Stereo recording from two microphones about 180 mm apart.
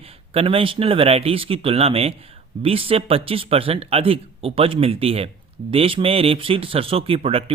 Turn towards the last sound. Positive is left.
turn(degrees=-30)  # may be behind; listen again after turning